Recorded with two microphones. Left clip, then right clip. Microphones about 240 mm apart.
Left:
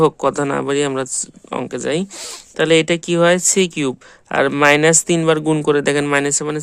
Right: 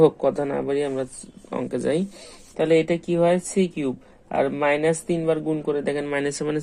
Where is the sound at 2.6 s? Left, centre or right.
Left.